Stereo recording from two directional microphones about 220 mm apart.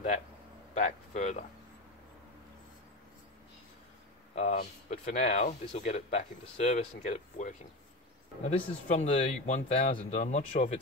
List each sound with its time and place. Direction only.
0.7 s speech: 30° left (ahead or behind)
4.4 s speech: 30° left (ahead or behind)